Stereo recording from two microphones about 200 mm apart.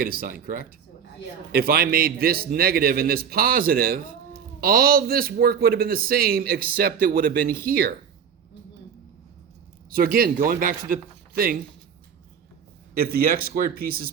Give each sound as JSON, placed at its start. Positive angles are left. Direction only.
{"t": 0.0, "sound": "a man's voice", "side_deg": -45}
{"t": 9.9, "sound": "a man's voice", "side_deg": -45}
{"t": 12.9, "sound": "a man's voice", "side_deg": -50}